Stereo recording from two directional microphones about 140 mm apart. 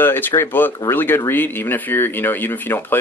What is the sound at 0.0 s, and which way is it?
Speech, 15° left (ahead or behind).